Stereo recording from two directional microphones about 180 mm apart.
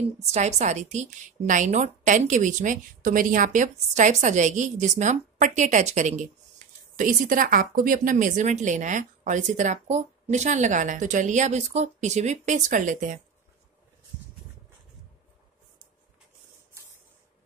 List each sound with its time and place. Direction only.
0.3 s speech: 40° right (ahead or behind)